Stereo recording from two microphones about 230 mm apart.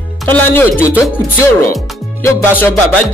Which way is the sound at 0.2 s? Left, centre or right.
Centre.